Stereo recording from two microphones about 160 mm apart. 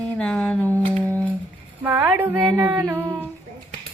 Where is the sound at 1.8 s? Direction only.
10° right (ahead or behind).